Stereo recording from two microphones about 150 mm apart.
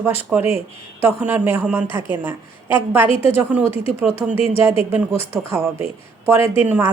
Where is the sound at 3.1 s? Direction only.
40° left (ahead or behind).